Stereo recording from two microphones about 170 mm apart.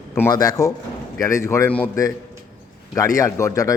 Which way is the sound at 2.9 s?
20° left (ahead or behind).